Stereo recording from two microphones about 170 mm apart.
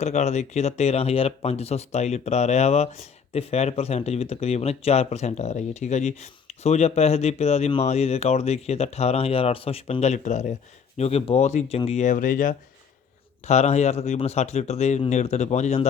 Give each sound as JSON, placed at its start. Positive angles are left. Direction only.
{"t": 0.0, "sound": "speech", "side_deg": 40}
{"t": 13.5, "sound": "speech", "side_deg": 40}